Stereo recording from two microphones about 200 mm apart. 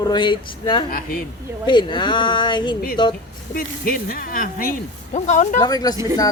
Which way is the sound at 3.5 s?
45° left (ahead or behind).